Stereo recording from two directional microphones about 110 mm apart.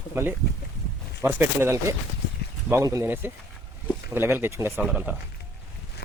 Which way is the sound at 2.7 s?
30° right (ahead or behind).